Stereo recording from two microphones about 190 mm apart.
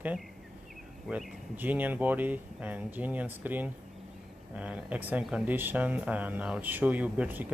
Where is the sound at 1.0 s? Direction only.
5° right (ahead or behind).